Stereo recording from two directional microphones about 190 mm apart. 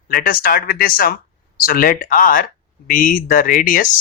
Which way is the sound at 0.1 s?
50° left (ahead or behind).